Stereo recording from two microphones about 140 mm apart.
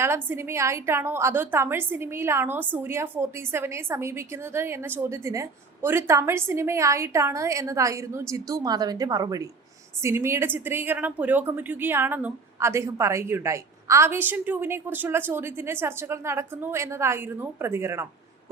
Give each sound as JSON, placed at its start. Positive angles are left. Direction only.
{"t": 0.0, "sound": "a woman's voice", "side_deg": -20}